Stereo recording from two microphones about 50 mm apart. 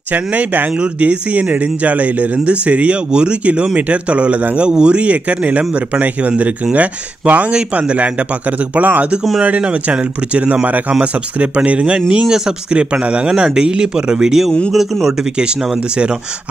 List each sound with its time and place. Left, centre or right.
0.1 s a man's voice: right; by 15.1 s centre